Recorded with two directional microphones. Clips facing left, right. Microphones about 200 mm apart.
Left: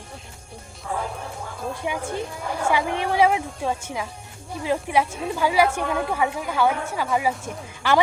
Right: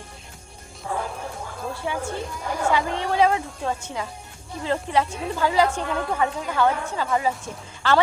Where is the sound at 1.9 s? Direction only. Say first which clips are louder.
Even; 15° left (ahead or behind).